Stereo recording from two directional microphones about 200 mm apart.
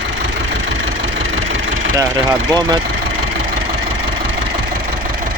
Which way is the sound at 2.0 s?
15° right (ahead or behind).